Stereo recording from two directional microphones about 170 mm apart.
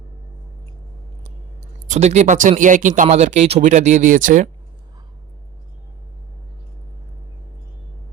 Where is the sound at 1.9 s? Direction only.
40° right (ahead or behind).